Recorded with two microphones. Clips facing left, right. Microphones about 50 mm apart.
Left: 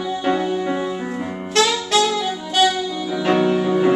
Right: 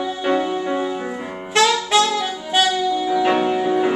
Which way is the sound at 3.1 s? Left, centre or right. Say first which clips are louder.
Left 2 dB; centre.